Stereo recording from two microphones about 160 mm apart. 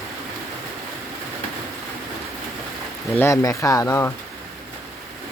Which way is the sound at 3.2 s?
20° left (ahead or behind).